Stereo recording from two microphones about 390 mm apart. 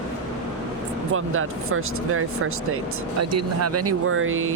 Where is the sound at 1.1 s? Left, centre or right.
Right.